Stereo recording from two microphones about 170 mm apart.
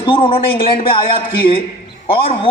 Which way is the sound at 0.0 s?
30° left (ahead or behind).